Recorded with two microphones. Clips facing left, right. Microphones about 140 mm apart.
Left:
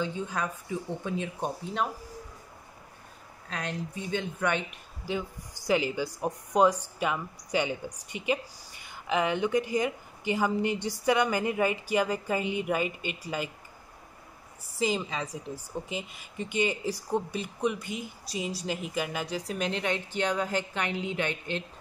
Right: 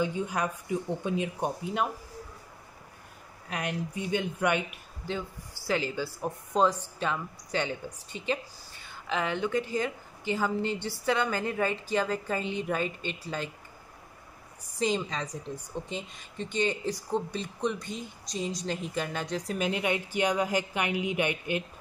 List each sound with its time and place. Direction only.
0.0 s speech: 10° right (ahead or behind)
3.4 s speech: 10° right (ahead or behind)
5.0 s speech: 10° left (ahead or behind)
14.8 s a woman's voice: 5° left (ahead or behind); by 21.6 s 10° right (ahead or behind)